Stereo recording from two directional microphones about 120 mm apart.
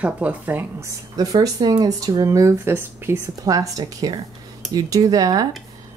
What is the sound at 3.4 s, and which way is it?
A woman's voice, 30° right (ahead or behind).